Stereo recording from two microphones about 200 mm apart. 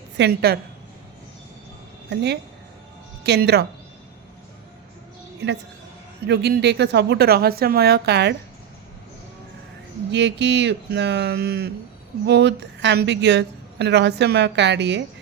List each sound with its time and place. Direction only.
0.2 s a woman's voice: 50° right (ahead or behind)
2.0 s a woman's voice: 55° right (ahead or behind)
5.4 s a woman's voice: 55° right (ahead or behind)
10.1 s a woman's voice: 60° right (ahead or behind)